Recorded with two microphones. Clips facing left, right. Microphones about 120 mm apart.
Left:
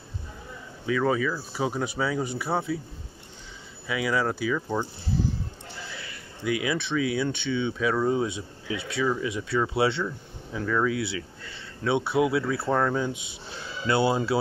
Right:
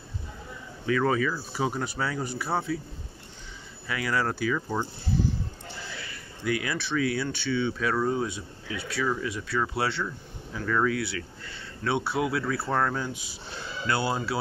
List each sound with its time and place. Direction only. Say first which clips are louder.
0.8 s speech: even; 5° left (ahead or behind)
3.8 s speech: left 2 dB; 10° left (ahead or behind)
6.4 s speech: left 2 dB; 15° left (ahead or behind)
13.8 s speech: left 5 dB; 25° left (ahead or behind)